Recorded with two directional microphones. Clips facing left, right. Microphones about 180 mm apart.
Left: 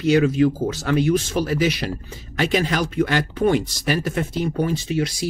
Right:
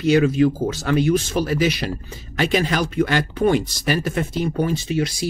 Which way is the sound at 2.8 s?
45° right (ahead or behind).